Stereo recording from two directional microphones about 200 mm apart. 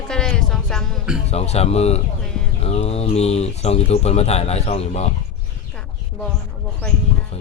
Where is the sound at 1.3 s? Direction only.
30° left (ahead or behind).